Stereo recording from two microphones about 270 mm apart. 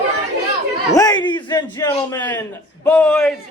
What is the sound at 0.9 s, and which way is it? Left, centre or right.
A man's voice, centre.